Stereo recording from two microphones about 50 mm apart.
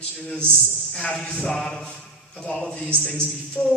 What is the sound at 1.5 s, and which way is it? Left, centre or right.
A man's voice, centre.